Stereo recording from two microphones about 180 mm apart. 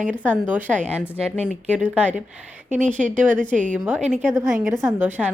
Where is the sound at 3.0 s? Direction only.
45° right (ahead or behind).